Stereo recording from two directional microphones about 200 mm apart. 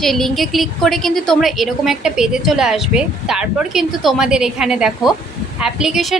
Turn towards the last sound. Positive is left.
turn(degrees=0)  # may be behind; listen again after turning